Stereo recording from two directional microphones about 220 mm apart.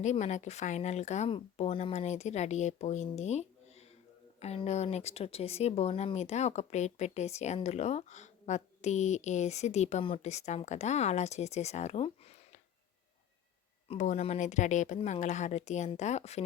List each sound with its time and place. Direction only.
0.0 s speech: 30° left (ahead or behind)
13.8 s speech: 30° left (ahead or behind)